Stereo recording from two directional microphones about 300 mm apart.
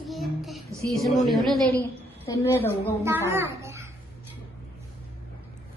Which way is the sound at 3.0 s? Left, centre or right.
Centre.